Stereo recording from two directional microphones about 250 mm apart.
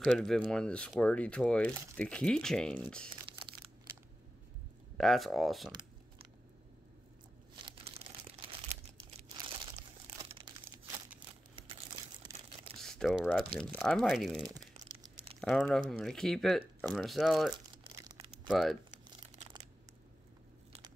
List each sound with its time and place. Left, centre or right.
0.2 s speech: centre
3.3 s a sound: centre
4.9 s speech: centre
9.7 s crumpling: centre
11.7 s a sound: centre
12.7 s camera: centre
13.6 s speech: centre
14.4 s crumpling: centre
15.4 s speech: centre
17.9 s crumpling: centre
18.5 s speech: centre
19.0 s crumpling: centre